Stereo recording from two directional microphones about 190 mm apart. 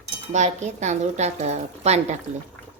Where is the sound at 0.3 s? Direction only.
35° right (ahead or behind).